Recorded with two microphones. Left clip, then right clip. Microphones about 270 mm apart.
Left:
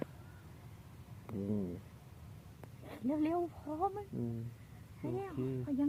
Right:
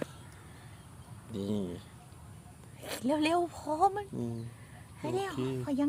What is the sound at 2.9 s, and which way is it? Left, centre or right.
Speech, right.